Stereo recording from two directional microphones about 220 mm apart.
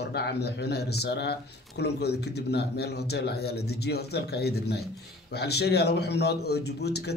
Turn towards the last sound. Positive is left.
turn(degrees=50)  # may be behind; listen again after turning